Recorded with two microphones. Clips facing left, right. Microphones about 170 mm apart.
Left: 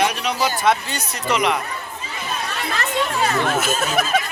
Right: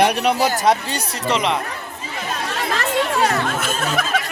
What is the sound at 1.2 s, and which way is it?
Speech, 30° right (ahead or behind).